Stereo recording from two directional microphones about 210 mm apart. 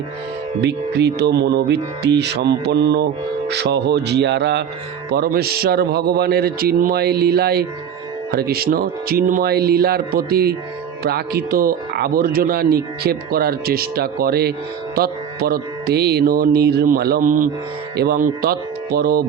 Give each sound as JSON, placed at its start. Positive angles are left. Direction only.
{"t": 0.6, "sound": "speech", "side_deg": -55}